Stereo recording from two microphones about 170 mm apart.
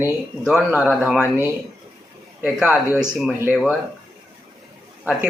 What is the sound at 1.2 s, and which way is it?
Speech, 15° left (ahead or behind).